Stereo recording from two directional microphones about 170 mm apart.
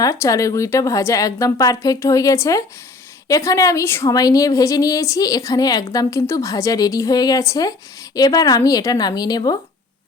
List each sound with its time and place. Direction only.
0.0 s a woman's voice: 20° left (ahead or behind)